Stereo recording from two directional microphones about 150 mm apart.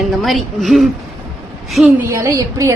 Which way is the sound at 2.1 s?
20° right (ahead or behind).